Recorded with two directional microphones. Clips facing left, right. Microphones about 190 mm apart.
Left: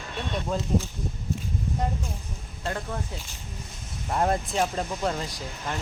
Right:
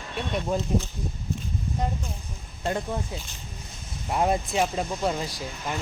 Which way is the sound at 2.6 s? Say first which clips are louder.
Right 4 dB; 20° right (ahead or behind).